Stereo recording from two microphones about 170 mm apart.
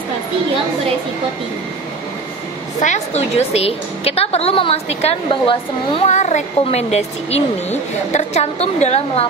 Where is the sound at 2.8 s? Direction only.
40° left (ahead or behind).